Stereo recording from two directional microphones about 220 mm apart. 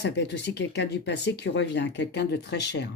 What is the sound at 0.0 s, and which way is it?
Speech, 50° left (ahead or behind).